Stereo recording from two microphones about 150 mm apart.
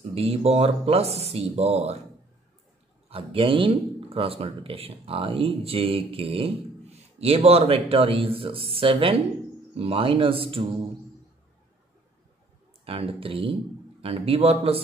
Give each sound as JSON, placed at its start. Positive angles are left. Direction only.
{"t": 0.1, "sound": "speech", "side_deg": -45}
{"t": 3.1, "sound": "speech", "side_deg": -40}
{"t": 12.8, "sound": "speech", "side_deg": -40}